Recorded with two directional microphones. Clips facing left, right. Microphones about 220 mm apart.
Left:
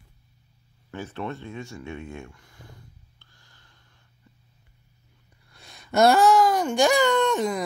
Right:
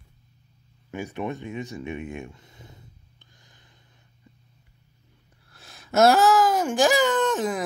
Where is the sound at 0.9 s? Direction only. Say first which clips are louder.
Right 2 dB; 15° right (ahead or behind).